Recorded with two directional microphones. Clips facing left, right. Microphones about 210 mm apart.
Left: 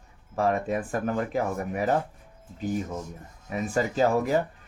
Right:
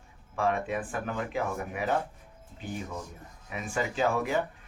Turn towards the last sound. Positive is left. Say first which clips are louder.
# left 5 dB
turn(degrees=40)  # may be behind; listen again after turning